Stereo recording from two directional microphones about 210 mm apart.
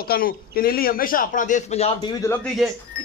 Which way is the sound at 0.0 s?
45° left (ahead or behind).